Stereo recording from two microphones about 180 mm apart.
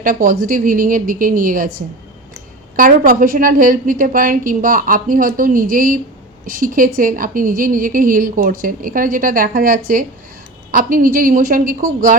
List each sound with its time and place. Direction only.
0.0 s a woman's voice: 50° right (ahead or behind)
2.7 s a woman's voice: 50° right (ahead or behind)